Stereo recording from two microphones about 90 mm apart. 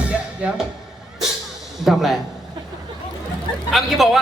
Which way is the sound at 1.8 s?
Centre (ahead or behind).